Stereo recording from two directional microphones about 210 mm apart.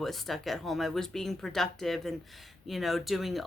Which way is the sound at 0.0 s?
Centre (ahead or behind).